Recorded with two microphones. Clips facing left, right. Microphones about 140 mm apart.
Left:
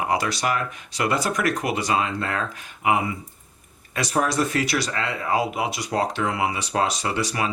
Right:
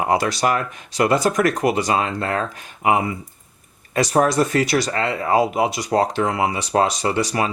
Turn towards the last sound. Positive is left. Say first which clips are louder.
# right 5 dB
turn(degrees=-40)  # may be behind; listen again after turning